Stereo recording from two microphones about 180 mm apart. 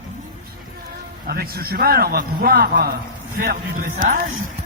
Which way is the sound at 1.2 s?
60° right (ahead or behind).